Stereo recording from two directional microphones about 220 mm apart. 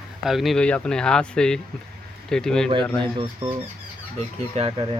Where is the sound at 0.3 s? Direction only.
Centre (ahead or behind).